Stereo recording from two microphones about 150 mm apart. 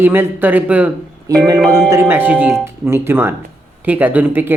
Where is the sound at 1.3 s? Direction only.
25° right (ahead or behind).